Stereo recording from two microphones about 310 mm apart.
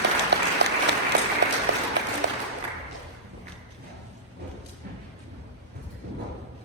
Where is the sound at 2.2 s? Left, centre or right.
Right.